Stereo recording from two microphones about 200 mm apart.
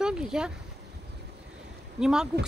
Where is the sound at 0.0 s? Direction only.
5° right (ahead or behind).